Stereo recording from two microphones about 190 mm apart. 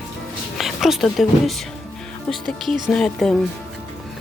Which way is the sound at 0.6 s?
Centre (ahead or behind).